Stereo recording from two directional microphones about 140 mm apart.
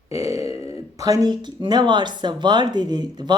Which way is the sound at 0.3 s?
20° right (ahead or behind).